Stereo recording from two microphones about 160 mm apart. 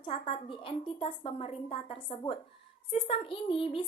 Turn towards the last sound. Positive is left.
turn(degrees=35)  # may be behind; listen again after turning